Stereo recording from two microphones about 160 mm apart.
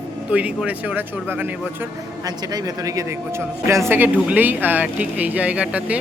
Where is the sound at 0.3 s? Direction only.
10° right (ahead or behind).